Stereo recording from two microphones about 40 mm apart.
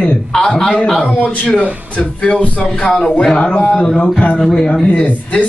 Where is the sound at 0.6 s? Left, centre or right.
Centre.